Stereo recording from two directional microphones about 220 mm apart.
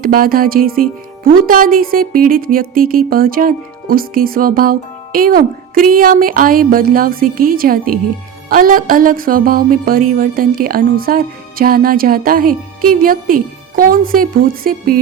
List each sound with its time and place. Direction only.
0.0 s speech: 40° right (ahead or behind)